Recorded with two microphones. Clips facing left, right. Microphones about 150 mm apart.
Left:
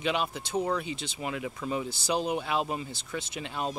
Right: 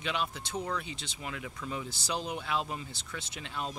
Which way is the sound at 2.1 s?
10° left (ahead or behind).